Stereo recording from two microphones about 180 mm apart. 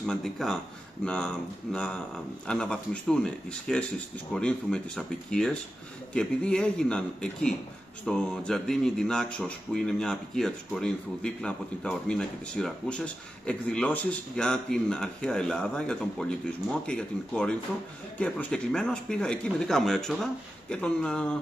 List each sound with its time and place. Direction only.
0.0 s speech: centre (ahead or behind)